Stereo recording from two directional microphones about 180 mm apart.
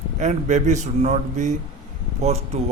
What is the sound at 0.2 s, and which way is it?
Speech, 40° right (ahead or behind).